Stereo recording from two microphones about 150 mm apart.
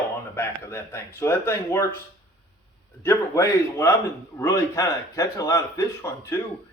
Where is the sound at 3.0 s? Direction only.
15° left (ahead or behind).